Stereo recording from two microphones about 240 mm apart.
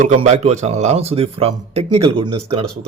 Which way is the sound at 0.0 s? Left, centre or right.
Right.